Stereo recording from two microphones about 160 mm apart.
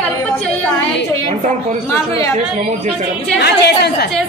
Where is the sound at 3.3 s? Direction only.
90° left.